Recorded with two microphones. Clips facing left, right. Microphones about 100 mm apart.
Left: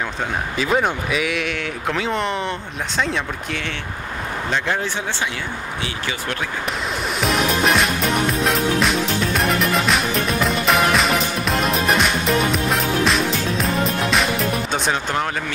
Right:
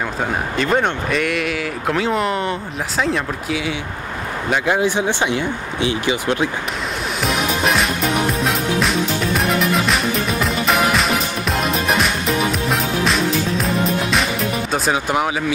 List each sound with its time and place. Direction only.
0.6 s speech: 5° left (ahead or behind); by 6.3 s 20° right (ahead or behind)
7.2 s music: centre (ahead or behind)